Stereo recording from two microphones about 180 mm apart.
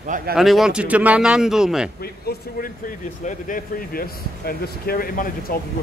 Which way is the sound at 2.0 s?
55° left (ahead or behind).